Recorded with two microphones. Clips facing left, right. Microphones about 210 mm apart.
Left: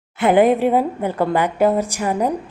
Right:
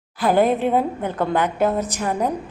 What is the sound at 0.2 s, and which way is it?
A woman's voice, 20° left (ahead or behind).